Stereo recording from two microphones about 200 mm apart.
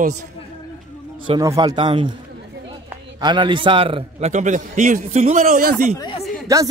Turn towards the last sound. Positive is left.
turn(degrees=-15)  # may be behind; listen again after turning